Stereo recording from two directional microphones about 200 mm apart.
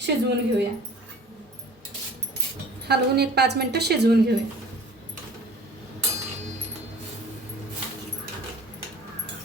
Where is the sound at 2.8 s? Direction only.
55° right (ahead or behind).